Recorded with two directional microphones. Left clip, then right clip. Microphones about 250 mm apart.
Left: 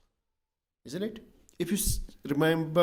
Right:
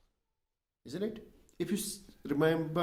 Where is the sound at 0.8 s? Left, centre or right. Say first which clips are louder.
Left 2 dB; left.